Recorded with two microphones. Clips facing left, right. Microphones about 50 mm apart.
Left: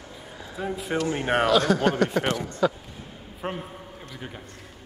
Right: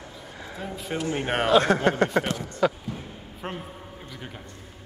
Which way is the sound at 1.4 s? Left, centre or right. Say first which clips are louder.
Right 3 dB; right.